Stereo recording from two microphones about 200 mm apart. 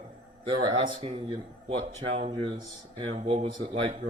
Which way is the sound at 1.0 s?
30° right (ahead or behind).